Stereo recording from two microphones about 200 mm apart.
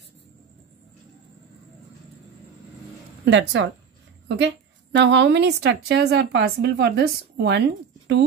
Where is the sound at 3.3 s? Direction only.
60° right (ahead or behind).